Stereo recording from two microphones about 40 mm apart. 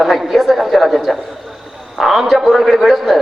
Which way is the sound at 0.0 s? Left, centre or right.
Centre.